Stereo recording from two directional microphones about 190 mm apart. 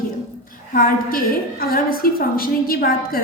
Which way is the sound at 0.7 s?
50° left (ahead or behind).